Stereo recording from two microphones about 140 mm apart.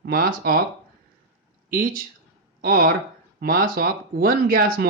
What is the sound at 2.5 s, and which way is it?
Speech, 90° right.